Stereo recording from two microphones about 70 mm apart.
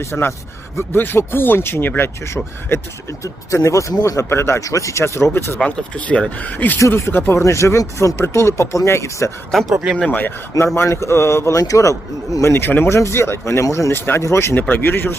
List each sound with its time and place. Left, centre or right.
0.0 s speech: left
3.5 s speech: left
4.6 s speech: left
5.6 s speech: centre
6.7 s speech: left
9.5 s speech: centre
10.1 s speech: left
10.8 s speech: left
11.6 s speech: left
13.9 s speech: left